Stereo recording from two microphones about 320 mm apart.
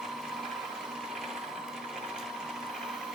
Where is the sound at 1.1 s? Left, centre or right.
Centre.